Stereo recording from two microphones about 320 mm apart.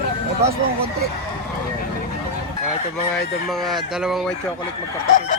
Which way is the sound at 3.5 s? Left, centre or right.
Centre.